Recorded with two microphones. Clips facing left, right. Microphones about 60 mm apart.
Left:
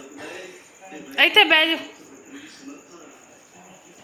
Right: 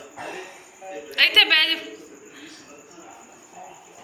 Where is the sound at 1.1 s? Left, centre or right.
Left.